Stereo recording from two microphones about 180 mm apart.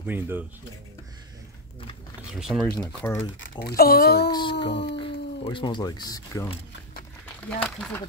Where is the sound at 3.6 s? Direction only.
60° left (ahead or behind).